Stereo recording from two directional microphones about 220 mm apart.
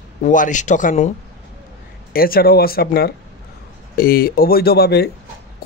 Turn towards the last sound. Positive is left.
turn(degrees=45)  # may be behind; listen again after turning